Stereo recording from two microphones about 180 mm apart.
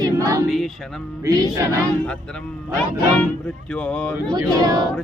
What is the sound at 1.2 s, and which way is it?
Speech, 20° right (ahead or behind).